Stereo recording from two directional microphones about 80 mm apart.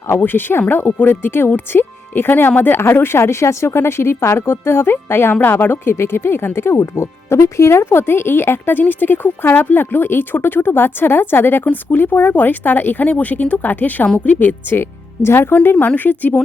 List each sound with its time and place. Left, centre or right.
0.1 s speech: left